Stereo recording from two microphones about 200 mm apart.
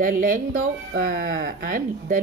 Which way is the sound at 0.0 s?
45° right (ahead or behind).